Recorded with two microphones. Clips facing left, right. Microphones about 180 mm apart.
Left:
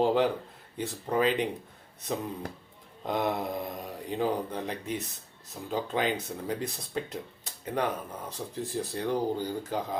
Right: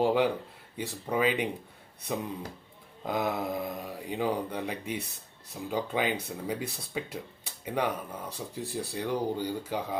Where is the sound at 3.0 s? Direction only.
5° right (ahead or behind).